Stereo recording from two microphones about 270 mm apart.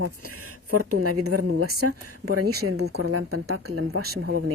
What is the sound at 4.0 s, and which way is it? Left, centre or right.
Speech, right.